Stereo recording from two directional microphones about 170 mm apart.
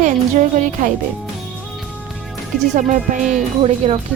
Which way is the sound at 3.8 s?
35° right (ahead or behind).